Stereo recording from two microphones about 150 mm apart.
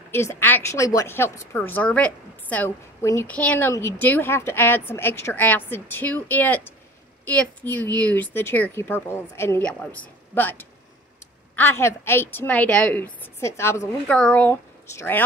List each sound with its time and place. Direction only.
0.1 s speech: 15° left (ahead or behind)